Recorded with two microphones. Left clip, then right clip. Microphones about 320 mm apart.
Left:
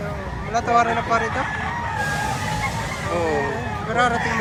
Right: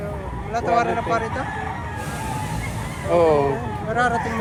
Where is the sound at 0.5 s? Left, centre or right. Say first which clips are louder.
Left 2 dB; centre.